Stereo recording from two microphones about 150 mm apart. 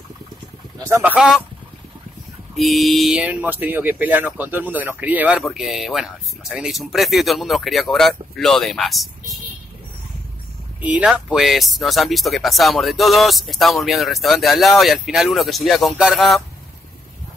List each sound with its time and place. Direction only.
0.8 s speech: 15° right (ahead or behind)
2.5 s speech: centre (ahead or behind)
10.8 s speech: 10° right (ahead or behind)